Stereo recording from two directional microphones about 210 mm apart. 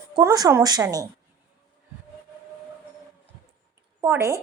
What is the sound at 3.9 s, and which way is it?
Speech, 15° right (ahead or behind).